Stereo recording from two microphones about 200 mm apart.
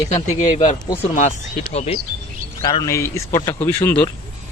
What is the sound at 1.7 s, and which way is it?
Speech, 35° left (ahead or behind).